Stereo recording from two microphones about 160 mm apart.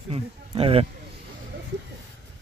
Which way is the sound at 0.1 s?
35° right (ahead or behind).